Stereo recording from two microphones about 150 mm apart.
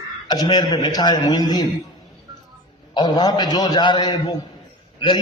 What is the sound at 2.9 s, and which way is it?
A man's voice, 30° left (ahead or behind).